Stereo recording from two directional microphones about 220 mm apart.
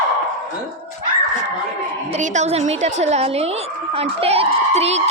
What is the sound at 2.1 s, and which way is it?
Speech, 30° right (ahead or behind).